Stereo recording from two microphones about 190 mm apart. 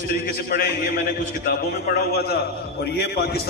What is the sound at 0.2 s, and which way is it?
A man's voice, 50° left (ahead or behind).